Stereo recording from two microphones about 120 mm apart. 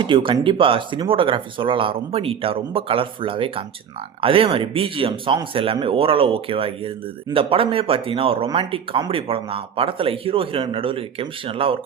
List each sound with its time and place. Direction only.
0.0 s speech: 45° right (ahead or behind)